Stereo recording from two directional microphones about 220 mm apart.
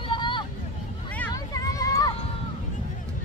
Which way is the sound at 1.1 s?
10° left (ahead or behind).